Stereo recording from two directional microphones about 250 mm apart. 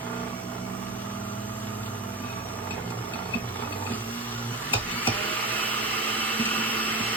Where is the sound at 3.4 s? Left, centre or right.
Centre.